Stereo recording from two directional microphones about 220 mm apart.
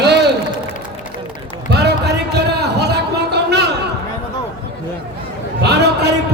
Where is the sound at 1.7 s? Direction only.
50° right (ahead or behind).